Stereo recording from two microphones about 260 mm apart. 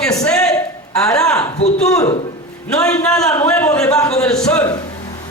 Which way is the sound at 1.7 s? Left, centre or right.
Centre.